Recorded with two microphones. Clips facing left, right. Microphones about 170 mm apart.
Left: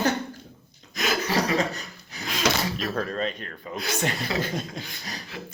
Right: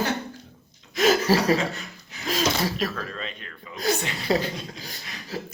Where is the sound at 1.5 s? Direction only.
40° left (ahead or behind).